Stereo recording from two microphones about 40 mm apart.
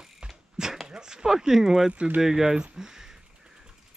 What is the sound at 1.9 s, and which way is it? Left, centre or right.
Speech, right.